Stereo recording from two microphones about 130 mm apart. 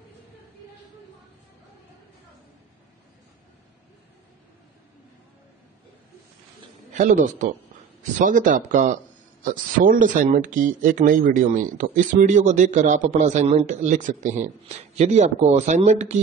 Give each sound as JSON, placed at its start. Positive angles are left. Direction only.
{"t": 6.9, "sound": "a man's voice", "side_deg": -75}
{"t": 9.4, "sound": "speech", "side_deg": -90}
{"t": 15.0, "sound": "speech", "side_deg": -60}